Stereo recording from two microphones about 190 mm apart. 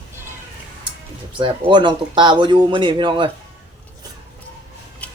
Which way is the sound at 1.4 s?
25° right (ahead or behind).